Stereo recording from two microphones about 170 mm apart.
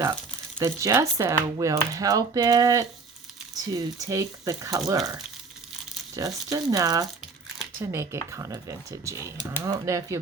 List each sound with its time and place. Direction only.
0.6 s speech: 20° right (ahead or behind)